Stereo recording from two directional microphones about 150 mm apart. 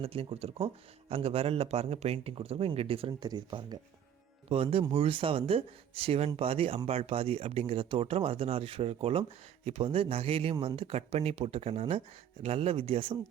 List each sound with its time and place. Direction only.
0.0 s speech: 40° right (ahead or behind)
3.1 s speech: 25° right (ahead or behind)
4.4 s speech: 40° right (ahead or behind)
10.5 s speech: 25° right (ahead or behind)
10.8 s speech: 40° right (ahead or behind)